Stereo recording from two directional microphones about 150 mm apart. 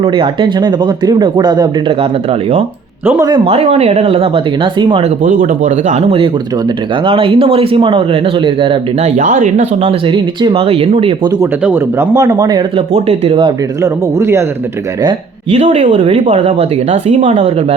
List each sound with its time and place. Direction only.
0.0 s speech: 35° right (ahead or behind)
3.1 s speech: 20° right (ahead or behind)
3.4 s speech: 40° right (ahead or behind)
5.2 s speech: 50° right (ahead or behind); by 8.8 s 35° right (ahead or behind)
9.0 s speech: 50° right (ahead or behind)
10.1 s speech: 35° right (ahead or behind)
11.6 s speech: 15° right (ahead or behind)
12.7 s speech: 45° right (ahead or behind)
13.8 s speech: 20° right (ahead or behind)
15.5 s speech: 40° right (ahead or behind)